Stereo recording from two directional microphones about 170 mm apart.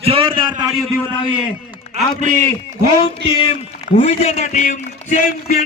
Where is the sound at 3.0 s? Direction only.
30° left (ahead or behind).